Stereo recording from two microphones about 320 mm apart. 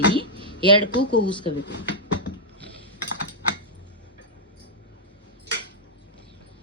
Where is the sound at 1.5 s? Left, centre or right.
Left.